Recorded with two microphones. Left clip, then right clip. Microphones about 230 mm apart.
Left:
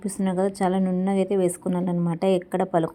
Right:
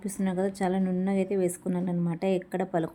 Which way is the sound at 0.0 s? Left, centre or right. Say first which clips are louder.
Left 5 dB; centre.